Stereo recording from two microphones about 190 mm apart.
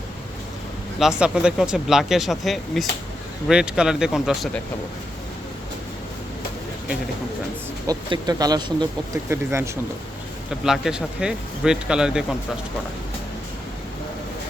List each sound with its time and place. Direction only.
0.9 s speech: 5° right (ahead or behind)
7.9 s speech: 20° right (ahead or behind)
10.6 s speech: 5° right (ahead or behind)